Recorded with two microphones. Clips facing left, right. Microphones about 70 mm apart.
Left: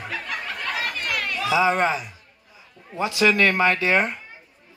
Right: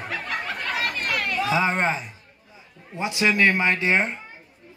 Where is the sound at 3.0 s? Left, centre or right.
Right.